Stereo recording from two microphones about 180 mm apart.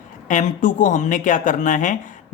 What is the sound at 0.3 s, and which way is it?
Speech, 45° left (ahead or behind).